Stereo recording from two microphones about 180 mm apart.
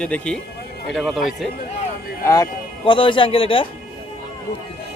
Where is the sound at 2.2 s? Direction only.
20° left (ahead or behind).